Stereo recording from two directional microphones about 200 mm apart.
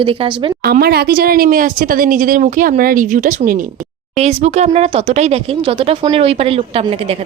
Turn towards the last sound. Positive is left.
turn(degrees=-30)  # may be behind; listen again after turning